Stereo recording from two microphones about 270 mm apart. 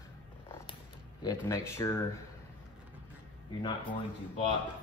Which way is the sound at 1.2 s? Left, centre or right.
Centre.